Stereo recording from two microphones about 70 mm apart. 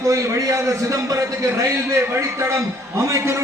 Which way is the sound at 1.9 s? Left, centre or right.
Right.